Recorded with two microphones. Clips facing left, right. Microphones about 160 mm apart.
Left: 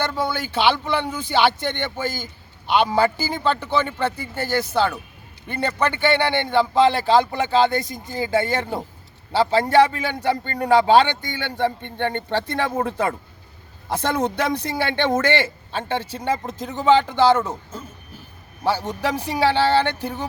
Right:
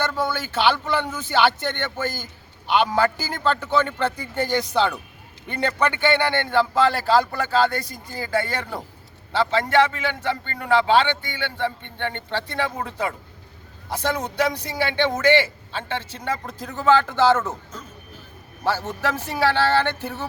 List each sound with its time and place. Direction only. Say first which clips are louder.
0.1 s a man's voice: left 1 dB; 15° left (ahead or behind)
18.6 s a man's voice: left 2 dB; 15° left (ahead or behind)